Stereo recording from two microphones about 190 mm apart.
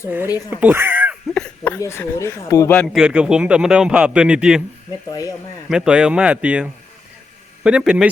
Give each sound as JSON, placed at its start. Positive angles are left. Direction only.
{"t": 0.3, "sound": "speech", "side_deg": 20}
{"t": 0.5, "sound": "speech", "side_deg": -10}
{"t": 1.3, "sound": "speech", "side_deg": 10}
{"t": 2.7, "sound": "a man's voice", "side_deg": 0}
{"t": 5.6, "sound": "a man's voice", "side_deg": -5}